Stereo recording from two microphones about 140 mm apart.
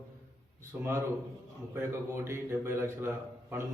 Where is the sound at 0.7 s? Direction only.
10° right (ahead or behind).